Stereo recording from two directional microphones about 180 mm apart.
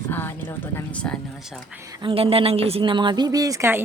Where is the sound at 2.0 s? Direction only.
30° right (ahead or behind); by 3.8 s 15° right (ahead or behind).